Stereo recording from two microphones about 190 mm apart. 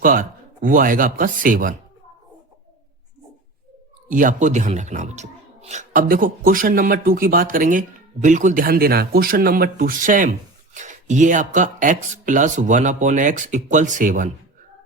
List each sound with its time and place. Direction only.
0.0 s speech: 45° right (ahead or behind)
4.1 s speech: 45° right (ahead or behind)